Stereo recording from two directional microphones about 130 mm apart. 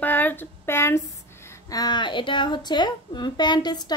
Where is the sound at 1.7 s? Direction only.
30° left (ahead or behind).